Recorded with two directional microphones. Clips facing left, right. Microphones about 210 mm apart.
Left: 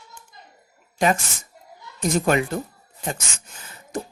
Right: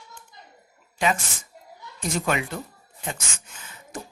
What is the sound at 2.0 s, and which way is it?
Speech, 40° left (ahead or behind).